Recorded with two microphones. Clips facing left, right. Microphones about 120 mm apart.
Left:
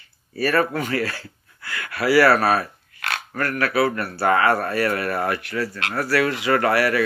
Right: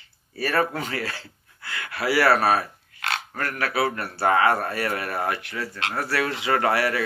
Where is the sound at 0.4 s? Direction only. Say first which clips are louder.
Left 3 dB; 20° right (ahead or behind).